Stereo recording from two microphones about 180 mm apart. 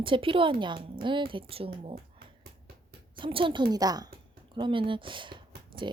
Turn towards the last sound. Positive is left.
turn(degrees=-25)  # may be behind; listen again after turning